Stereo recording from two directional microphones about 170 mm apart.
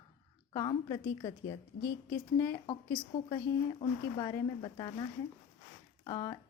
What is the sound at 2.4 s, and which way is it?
Speech, 20° left (ahead or behind).